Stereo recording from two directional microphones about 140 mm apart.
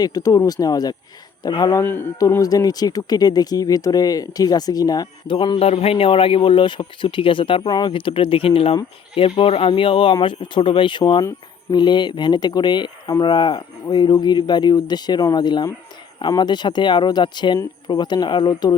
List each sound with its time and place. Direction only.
0.0 s speech: 25° left (ahead or behind)
1.8 s speech: 15° left (ahead or behind); by 18.7 s 30° left (ahead or behind)